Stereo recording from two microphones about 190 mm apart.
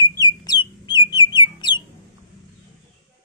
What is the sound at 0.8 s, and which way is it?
Bird, 20° left (ahead or behind).